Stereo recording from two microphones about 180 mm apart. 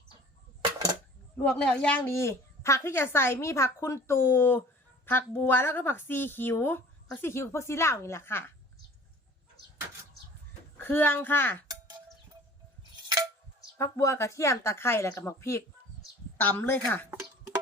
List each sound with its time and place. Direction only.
1.4 s speech: 5° left (ahead or behind)
10.8 s speech: 10° left (ahead or behind)
13.7 s speech: 15° left (ahead or behind)